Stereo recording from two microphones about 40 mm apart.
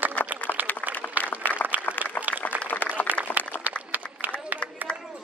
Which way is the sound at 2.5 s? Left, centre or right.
Right.